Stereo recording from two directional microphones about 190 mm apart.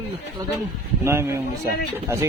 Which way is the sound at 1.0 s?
15° right (ahead or behind).